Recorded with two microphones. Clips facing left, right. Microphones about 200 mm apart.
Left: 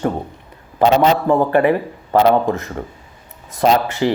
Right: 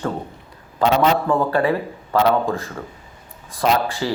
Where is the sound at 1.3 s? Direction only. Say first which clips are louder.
Left 4 dB; 20° left (ahead or behind).